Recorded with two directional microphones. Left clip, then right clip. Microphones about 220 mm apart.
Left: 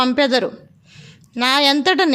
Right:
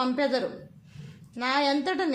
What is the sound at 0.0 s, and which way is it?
A woman's voice, 45° left (ahead or behind).